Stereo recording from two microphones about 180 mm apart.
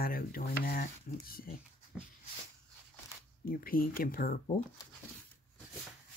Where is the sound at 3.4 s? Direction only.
55° left (ahead or behind).